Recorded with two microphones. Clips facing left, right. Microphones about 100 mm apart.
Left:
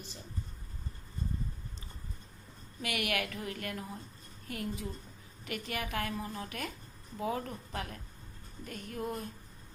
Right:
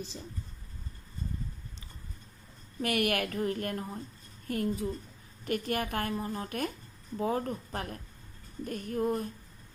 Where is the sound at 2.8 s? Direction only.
45° right (ahead or behind).